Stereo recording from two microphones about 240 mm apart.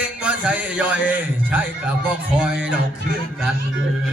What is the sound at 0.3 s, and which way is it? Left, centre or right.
Speech, centre.